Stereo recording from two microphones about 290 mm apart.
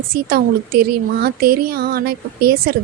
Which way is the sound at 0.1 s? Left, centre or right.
Right.